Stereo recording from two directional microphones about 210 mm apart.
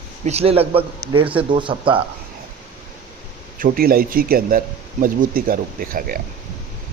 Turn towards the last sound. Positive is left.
turn(degrees=-40)  # may be behind; listen again after turning